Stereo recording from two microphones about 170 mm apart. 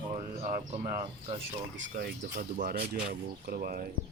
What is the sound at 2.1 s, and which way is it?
Speech, 70° right (ahead or behind).